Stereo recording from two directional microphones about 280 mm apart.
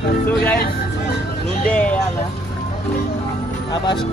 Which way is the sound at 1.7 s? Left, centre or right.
Centre.